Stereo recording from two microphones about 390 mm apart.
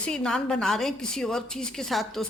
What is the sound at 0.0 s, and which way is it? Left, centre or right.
A woman's voice, centre.